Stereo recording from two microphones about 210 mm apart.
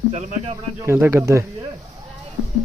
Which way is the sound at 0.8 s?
10° right (ahead or behind).